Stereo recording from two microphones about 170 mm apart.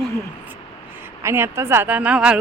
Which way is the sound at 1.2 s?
15° right (ahead or behind).